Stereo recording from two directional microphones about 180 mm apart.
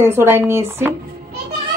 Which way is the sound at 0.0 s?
15° right (ahead or behind).